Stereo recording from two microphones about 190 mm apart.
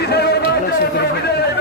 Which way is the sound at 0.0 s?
60° left (ahead or behind).